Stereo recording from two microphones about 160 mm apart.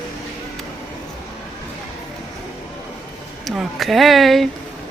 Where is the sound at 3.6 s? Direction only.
Centre (ahead or behind).